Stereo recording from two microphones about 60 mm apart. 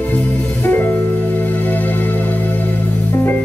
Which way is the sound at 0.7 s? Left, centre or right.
Left.